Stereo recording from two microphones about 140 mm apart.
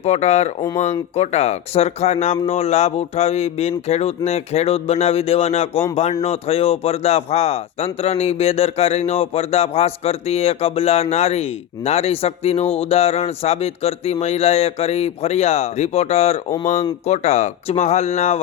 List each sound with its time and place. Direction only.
0.0 s speech: 50° left (ahead or behind)